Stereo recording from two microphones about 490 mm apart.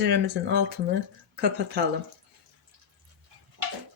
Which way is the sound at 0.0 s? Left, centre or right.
Centre.